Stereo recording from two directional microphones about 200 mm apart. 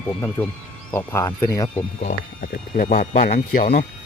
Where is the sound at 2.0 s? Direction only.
40° left (ahead or behind).